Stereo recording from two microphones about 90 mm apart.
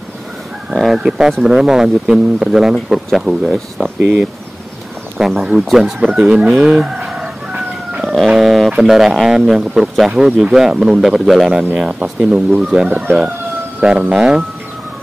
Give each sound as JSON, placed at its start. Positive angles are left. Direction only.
{"t": 0.7, "sound": "speech", "side_deg": -5}
{"t": 4.0, "sound": "speech", "side_deg": -20}
{"t": 5.2, "sound": "speech", "side_deg": -5}
{"t": 6.6, "sound": "chicken", "side_deg": -10}
{"t": 8.0, "sound": "speech", "side_deg": 0}